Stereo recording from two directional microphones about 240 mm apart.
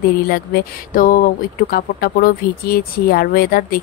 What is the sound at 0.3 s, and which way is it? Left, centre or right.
Speech, left.